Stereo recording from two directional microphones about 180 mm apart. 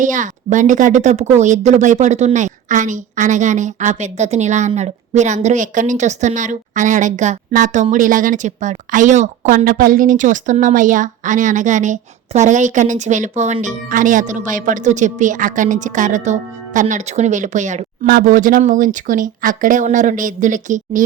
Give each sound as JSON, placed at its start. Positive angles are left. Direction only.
{"t": 0.0, "sound": "a woman's voice", "side_deg": -45}